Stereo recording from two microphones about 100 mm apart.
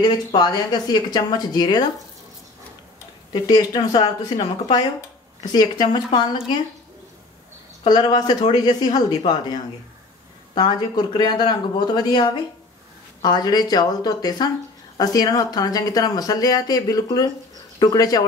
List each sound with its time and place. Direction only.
0.0 s speech: 45° left (ahead or behind)
3.3 s speech: 40° left (ahead or behind)
5.4 s speech: 45° left (ahead or behind)
7.8 s speech: 45° left (ahead or behind)